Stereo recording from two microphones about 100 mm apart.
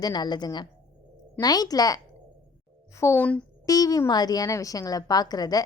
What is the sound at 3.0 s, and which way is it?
A woman's voice, 30° left (ahead or behind).